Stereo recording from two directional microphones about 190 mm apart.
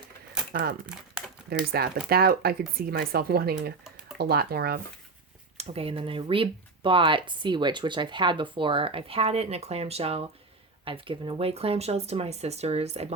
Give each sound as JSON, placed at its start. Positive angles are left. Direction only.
{"t": 0.5, "sound": "speech", "side_deg": -55}
{"t": 5.5, "sound": "speech", "side_deg": -30}